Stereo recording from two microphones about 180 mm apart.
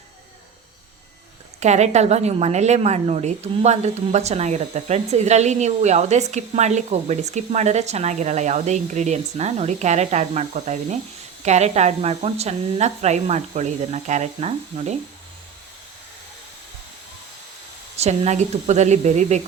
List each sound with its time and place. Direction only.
1.5 s a woman's voice: 40° right (ahead or behind)
17.9 s a woman's voice: 35° right (ahead or behind)